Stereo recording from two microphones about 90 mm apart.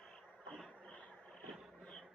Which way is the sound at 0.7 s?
15° left (ahead or behind).